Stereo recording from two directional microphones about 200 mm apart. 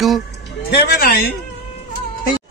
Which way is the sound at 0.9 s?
50° left (ahead or behind).